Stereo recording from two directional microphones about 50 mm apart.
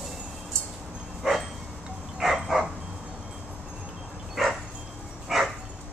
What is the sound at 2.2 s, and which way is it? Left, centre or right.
Dog, centre.